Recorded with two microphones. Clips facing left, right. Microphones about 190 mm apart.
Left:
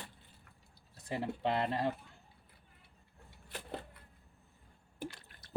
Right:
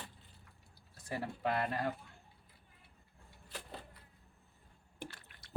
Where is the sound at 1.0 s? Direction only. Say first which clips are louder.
Left 2 dB; 20° left (ahead or behind).